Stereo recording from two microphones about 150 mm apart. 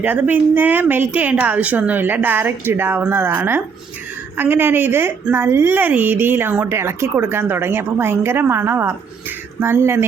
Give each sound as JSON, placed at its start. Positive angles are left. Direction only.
{"t": 0.0, "sound": "a woman's voice", "side_deg": -10}